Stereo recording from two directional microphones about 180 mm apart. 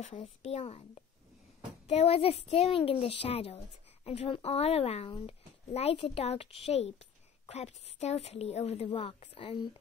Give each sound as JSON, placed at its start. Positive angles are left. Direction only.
{"t": 0.1, "sound": "speech", "side_deg": 35}